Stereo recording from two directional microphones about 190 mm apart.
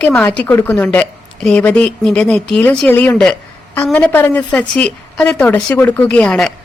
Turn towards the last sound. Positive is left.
turn(degrees=5)  # may be behind; listen again after turning